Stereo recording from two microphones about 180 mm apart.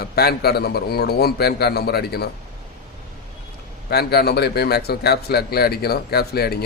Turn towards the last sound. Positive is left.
turn(degrees=60)  # may be behind; listen again after turning